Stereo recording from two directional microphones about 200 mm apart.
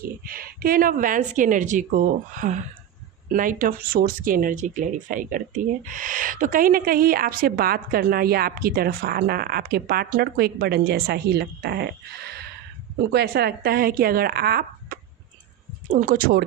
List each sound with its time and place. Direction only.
0.0 s speech: 45° right (ahead or behind)
13.1 s speech: 55° right (ahead or behind)